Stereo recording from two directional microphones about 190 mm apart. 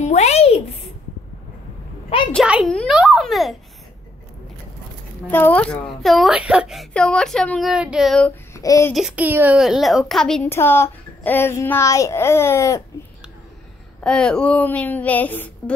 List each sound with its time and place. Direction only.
0.0 s a sound: 35° left (ahead or behind)
2.3 s speech: 5° right (ahead or behind)
5.3 s speech: 10° left (ahead or behind)
8.5 s speech: 15° left (ahead or behind)
8.9 s a woman's voice: 5° right (ahead or behind); by 12.8 s 15° left (ahead or behind)
14.0 s a woman's voice: 5° left (ahead or behind)